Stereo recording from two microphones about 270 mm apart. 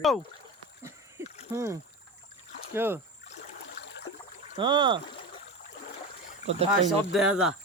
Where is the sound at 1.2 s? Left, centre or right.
Centre.